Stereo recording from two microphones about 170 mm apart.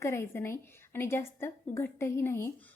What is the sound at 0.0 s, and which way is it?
A woman's voice, 15° left (ahead or behind).